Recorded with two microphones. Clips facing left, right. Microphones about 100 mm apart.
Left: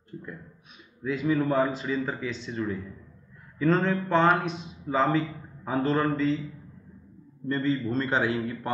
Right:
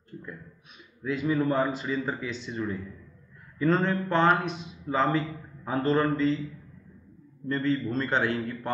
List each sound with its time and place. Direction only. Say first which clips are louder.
0.1 s a sound: left 2 dB; 15° left (ahead or behind)
1.0 s a man's voice: left 1 dB; centre (ahead or behind)
7.4 s a man's voice: even; centre (ahead or behind)